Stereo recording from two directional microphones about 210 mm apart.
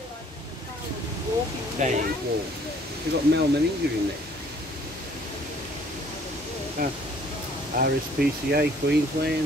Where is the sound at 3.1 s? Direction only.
50° right (ahead or behind).